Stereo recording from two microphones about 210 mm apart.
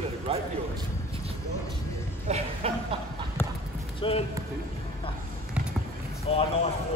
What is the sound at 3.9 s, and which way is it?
Speech, 25° left (ahead or behind).